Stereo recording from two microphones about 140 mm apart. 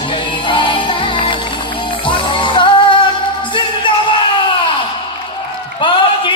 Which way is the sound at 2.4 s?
35° left (ahead or behind).